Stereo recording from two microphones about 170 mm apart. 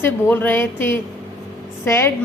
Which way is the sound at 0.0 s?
10° left (ahead or behind).